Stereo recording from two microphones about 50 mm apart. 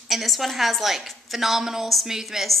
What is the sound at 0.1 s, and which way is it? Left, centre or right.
A woman's voice, centre.